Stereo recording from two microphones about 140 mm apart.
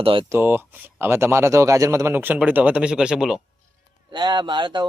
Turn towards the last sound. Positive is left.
turn(degrees=-35)  # may be behind; listen again after turning